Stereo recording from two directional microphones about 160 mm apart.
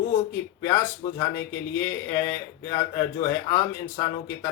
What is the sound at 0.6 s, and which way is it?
A man's voice, 20° left (ahead or behind).